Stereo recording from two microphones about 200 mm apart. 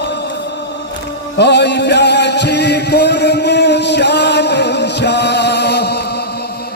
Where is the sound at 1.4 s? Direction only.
55° left (ahead or behind).